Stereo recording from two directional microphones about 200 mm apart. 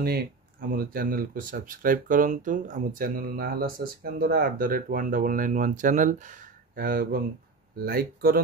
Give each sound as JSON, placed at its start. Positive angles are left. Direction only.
{"t": 0.0, "sound": "speech", "side_deg": -45}